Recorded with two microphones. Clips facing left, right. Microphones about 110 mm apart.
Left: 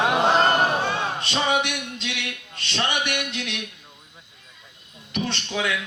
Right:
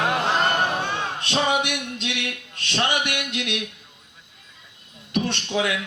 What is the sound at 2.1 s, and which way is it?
Speech, 50° right (ahead or behind).